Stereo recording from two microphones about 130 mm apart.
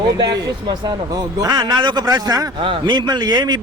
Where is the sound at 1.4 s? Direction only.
30° right (ahead or behind).